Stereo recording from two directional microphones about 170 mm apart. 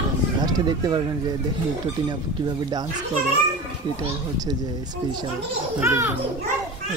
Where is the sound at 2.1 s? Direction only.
25° right (ahead or behind).